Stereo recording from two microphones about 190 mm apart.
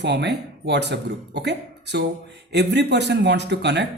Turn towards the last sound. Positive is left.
turn(degrees=-65)  # may be behind; listen again after turning